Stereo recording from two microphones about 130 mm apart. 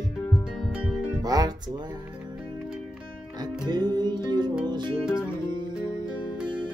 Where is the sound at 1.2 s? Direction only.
30° right (ahead or behind).